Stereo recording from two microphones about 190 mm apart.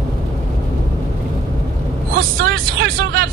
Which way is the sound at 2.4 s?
55° right (ahead or behind).